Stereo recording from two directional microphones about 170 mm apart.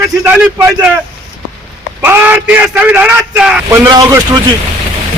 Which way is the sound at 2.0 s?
10° right (ahead or behind).